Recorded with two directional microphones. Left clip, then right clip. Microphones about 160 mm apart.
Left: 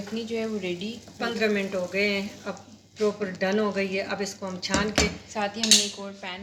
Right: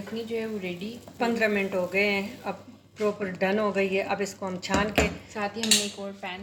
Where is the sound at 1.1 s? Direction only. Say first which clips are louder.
Right 1 dB; 50° right (ahead or behind).